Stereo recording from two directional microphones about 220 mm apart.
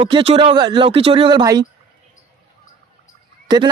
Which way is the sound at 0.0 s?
25° right (ahead or behind).